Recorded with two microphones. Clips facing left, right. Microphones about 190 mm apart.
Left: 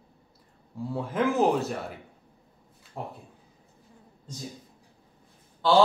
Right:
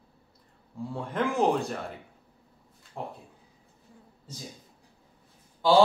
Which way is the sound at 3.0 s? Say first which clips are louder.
Even; 5° left (ahead or behind).